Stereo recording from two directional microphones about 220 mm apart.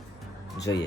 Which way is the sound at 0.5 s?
15° left (ahead or behind).